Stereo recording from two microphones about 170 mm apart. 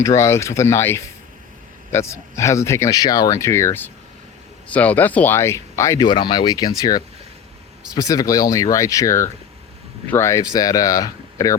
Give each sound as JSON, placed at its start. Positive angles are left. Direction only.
{"t": 0.0, "sound": "speech", "side_deg": 15}
{"t": 6.1, "sound": "speech", "side_deg": 30}
{"t": 7.9, "sound": "speech", "side_deg": 20}